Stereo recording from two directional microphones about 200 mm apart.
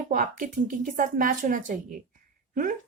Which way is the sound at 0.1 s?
40° right (ahead or behind).